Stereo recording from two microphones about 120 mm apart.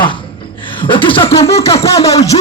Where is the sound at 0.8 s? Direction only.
45° left (ahead or behind).